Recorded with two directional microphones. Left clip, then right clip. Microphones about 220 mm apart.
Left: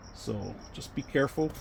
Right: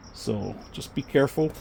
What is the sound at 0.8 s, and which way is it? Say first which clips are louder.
Speech: right 6 dB; 45° right (ahead or behind).